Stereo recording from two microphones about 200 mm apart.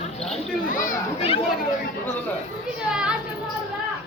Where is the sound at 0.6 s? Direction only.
40° left (ahead or behind).